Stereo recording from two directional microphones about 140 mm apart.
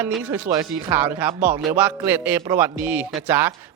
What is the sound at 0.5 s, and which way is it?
Speech, 20° right (ahead or behind).